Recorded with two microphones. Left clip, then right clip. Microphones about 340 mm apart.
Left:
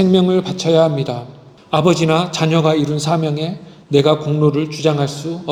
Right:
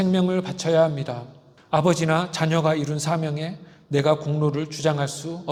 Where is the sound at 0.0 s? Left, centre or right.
Right.